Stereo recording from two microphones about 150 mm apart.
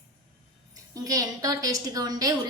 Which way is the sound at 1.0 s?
25° right (ahead or behind).